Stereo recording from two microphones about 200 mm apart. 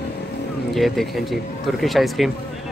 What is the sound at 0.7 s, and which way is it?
Speech, centre (ahead or behind).